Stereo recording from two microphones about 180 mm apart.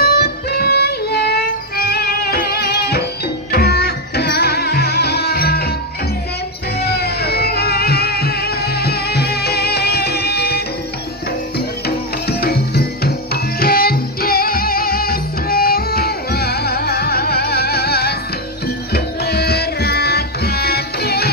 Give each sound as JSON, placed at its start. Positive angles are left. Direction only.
{"t": 0.0, "sound": "music", "side_deg": 60}
{"t": 6.8, "sound": "music", "side_deg": 60}
{"t": 12.3, "sound": "music", "side_deg": 60}